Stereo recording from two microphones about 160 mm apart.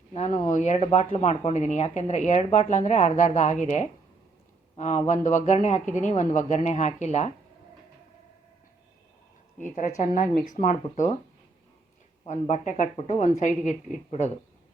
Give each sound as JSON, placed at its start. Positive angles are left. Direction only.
{"t": 0.3, "sound": "speech", "side_deg": 50}
{"t": 9.6, "sound": "speech", "side_deg": 50}
{"t": 12.2, "sound": "speech", "side_deg": 45}